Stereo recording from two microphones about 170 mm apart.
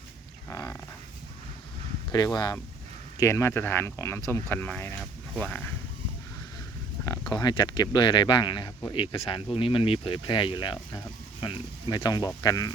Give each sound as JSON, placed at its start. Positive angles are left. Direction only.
{"t": 0.5, "sound": "speech", "side_deg": 15}
{"t": 2.1, "sound": "speech", "side_deg": 25}
{"t": 7.3, "sound": "speech", "side_deg": 25}